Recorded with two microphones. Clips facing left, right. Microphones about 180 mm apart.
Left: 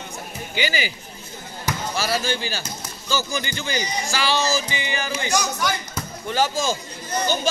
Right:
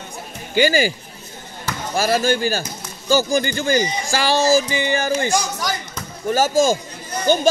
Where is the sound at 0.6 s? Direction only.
45° right (ahead or behind).